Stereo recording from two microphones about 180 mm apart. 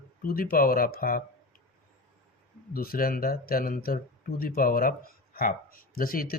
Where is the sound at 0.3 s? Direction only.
55° left (ahead or behind).